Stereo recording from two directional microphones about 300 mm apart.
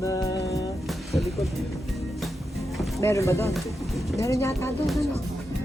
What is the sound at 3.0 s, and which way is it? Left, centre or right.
Speech, centre.